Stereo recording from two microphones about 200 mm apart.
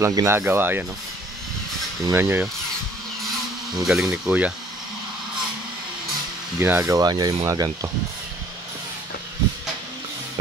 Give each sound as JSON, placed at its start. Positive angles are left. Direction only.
{"t": 0.0, "sound": "speech", "side_deg": -15}
{"t": 2.0, "sound": "speech", "side_deg": -15}
{"t": 3.7, "sound": "speech", "side_deg": 0}
{"t": 6.6, "sound": "speech", "side_deg": -15}